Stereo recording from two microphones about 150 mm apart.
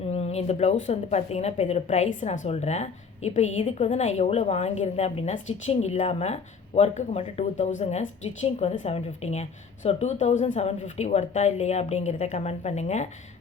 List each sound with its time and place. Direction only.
0.0 s a woman's voice: 45° left (ahead or behind)